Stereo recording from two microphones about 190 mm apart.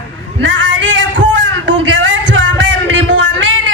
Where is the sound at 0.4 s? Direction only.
75° right (ahead or behind).